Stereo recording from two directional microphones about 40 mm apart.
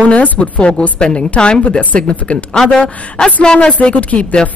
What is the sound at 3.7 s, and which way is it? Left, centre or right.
Speech, left.